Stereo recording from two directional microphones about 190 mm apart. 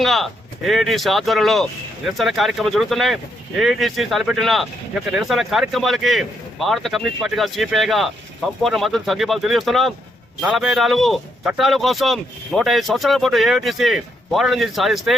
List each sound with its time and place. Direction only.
0.0 s speech: centre (ahead or behind)